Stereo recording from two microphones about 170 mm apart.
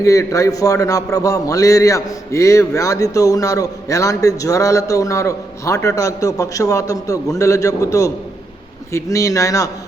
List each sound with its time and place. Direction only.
0.0 s a man's voice: 20° left (ahead or behind)